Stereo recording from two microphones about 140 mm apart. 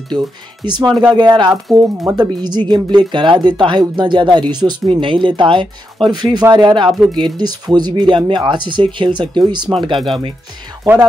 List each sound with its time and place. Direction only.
0.6 s speech: 35° right (ahead or behind)
9.9 s speech: centre (ahead or behind)